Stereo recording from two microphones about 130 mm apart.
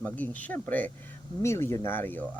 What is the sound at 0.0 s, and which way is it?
Speech, 10° left (ahead or behind).